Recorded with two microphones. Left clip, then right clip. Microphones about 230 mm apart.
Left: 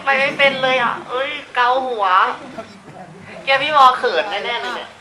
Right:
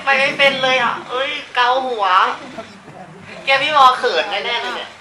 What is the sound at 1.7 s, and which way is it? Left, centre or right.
Speech, left.